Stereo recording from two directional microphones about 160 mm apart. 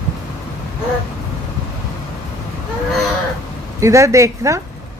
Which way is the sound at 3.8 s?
20° right (ahead or behind).